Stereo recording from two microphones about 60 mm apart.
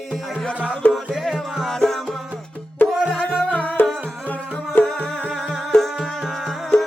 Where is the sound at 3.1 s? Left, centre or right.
Left.